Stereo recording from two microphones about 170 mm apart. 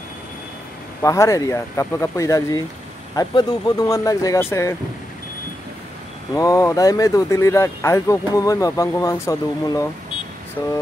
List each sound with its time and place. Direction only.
1.0 s speech: 20° left (ahead or behind)
6.3 s speech: 20° left (ahead or behind)